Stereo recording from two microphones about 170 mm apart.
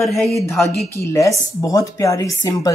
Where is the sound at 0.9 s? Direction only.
20° left (ahead or behind).